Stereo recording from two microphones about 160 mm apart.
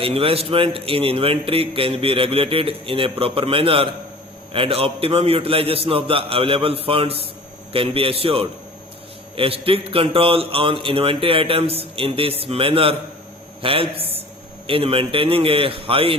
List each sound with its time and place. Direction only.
0.0 s a man's voice: 35° right (ahead or behind)